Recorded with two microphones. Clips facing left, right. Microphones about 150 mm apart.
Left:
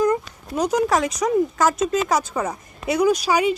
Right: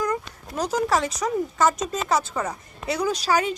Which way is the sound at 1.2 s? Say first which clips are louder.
Left 3 dB; 10° left (ahead or behind).